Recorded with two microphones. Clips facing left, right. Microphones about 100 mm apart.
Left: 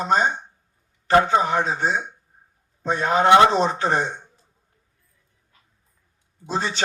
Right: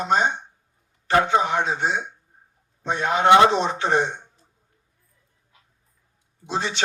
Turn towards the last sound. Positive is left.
turn(degrees=40)  # may be behind; listen again after turning